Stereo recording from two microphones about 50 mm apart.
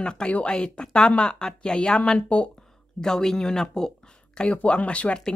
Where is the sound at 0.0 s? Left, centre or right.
Centre.